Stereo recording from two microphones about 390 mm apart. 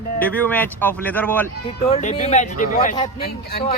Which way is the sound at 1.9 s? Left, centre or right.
Centre.